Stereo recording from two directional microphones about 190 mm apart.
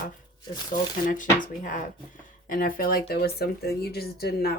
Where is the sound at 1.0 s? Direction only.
45° left (ahead or behind).